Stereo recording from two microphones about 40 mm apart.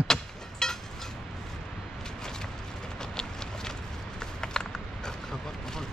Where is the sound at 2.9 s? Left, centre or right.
Centre.